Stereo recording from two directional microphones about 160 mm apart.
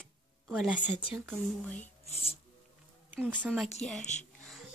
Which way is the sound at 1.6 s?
10° left (ahead or behind).